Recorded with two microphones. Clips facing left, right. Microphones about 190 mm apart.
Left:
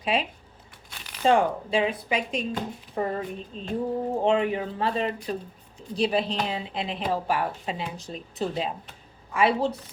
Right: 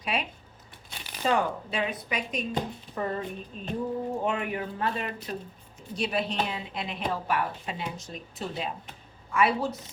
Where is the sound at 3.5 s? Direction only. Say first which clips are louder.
Left 3 dB; 30° left (ahead or behind).